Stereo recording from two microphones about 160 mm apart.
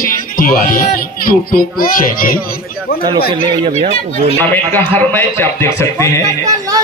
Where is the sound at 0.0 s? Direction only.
60° left (ahead or behind).